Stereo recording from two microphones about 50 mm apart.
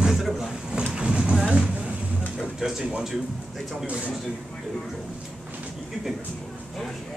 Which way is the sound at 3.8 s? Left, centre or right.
Right.